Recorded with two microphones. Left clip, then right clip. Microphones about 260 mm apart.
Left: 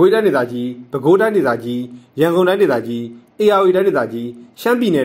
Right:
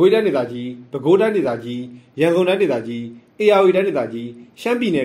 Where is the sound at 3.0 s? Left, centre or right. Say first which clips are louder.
Left 4 dB; left.